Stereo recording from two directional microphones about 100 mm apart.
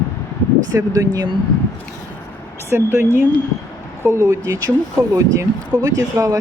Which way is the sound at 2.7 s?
25° right (ahead or behind).